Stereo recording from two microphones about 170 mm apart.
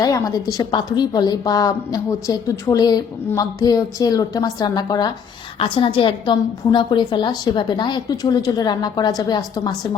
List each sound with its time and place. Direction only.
0.0 s a woman's voice: 20° left (ahead or behind)